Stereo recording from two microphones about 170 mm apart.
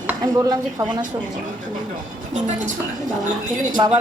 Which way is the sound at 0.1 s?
20° right (ahead or behind).